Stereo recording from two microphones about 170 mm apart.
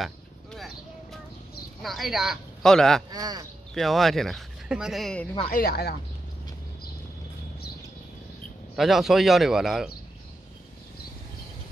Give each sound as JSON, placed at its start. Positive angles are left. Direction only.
{"t": 0.0, "sound": "a sound", "side_deg": 0}
{"t": 1.8, "sound": "speech", "side_deg": 0}
{"t": 3.1, "sound": "speech", "side_deg": -20}
{"t": 3.7, "sound": "speech", "side_deg": 0}
{"t": 5.5, "sound": "speech", "side_deg": 70}
{"t": 8.7, "sound": "speech", "side_deg": 0}